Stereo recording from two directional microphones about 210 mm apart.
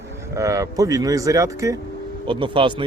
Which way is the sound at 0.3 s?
15° right (ahead or behind).